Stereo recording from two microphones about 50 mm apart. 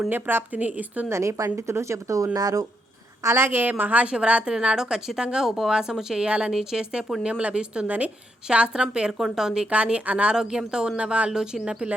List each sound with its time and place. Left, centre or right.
0.1 s a woman's voice: right
0.5 s a woman's voice: right
1.1 s a woman's voice: right
3.2 s a woman's voice: right
4.0 s a woman's voice: right
6.2 s speech: right
6.5 s a woman's voice: centre
7.9 s a woman's voice: right
8.4 s a woman's voice: centre
9.1 s a woman's voice: centre
9.6 s a woman's voice: right
11.3 s a woman's voice: centre